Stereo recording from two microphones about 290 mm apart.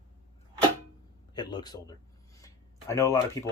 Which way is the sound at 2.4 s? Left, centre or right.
Centre.